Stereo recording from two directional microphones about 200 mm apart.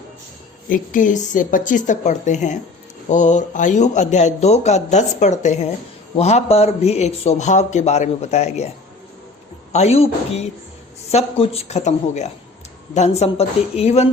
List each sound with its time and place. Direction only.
0.7 s speech: 40° left (ahead or behind)
9.7 s speech: 30° left (ahead or behind)